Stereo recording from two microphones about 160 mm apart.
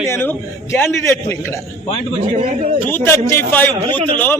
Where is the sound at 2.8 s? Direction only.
15° left (ahead or behind).